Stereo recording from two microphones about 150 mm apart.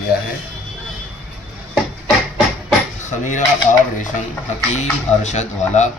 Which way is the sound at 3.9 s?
55° left (ahead or behind).